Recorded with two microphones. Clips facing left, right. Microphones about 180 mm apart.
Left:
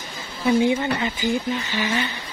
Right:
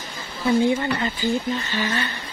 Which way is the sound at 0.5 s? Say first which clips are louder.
Even; 15° left (ahead or behind).